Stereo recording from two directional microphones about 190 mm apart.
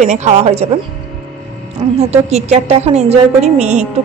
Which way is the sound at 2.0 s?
35° right (ahead or behind).